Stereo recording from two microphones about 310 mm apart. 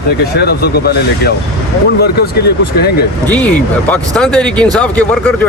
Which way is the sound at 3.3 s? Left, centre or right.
Centre.